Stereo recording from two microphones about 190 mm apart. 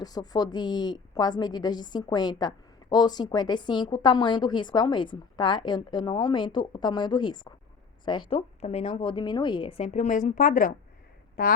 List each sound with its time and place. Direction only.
0.0 s a woman's voice: 20° left (ahead or behind); by 11.5 s 50° left (ahead or behind)